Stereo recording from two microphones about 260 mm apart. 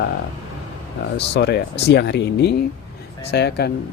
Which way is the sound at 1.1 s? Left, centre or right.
Left.